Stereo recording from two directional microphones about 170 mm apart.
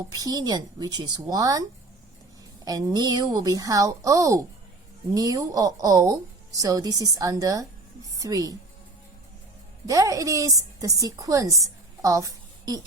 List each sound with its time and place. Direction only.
0.2 s a woman's voice: 20° right (ahead or behind)
2.6 s a woman's voice: 20° right (ahead or behind)
9.8 s a woman's voice: 20° right (ahead or behind)